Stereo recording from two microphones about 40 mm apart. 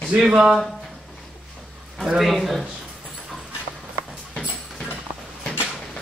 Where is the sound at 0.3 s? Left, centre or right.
Centre.